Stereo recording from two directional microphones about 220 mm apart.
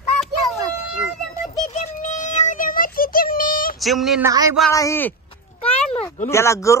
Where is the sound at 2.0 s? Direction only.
35° left (ahead or behind).